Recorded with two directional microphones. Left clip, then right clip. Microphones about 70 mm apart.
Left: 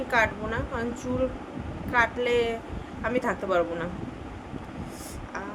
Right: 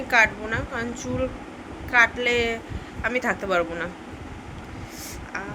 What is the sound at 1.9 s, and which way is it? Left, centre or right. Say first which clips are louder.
A woman's voice: right 4 dB; left.